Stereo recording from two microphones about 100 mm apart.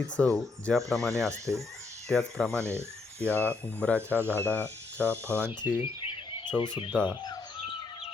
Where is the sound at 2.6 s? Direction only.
25° right (ahead or behind).